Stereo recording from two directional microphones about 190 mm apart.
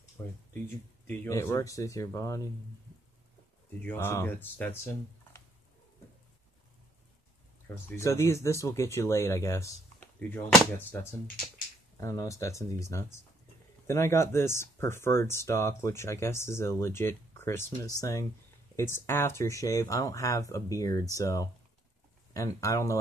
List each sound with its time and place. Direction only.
1.0 s speech: 10° left (ahead or behind)
3.8 s speech: 10° left (ahead or behind)
7.7 s speech: 15° left (ahead or behind)